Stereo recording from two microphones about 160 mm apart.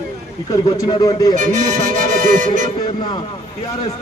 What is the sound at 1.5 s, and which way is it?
Music, 55° right (ahead or behind).